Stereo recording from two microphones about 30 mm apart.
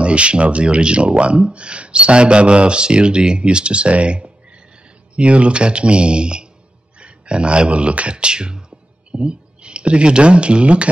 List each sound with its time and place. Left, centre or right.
0.0 s speech: right